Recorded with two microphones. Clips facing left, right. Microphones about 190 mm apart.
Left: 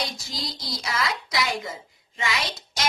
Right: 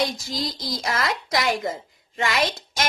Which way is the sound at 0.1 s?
50° right (ahead or behind).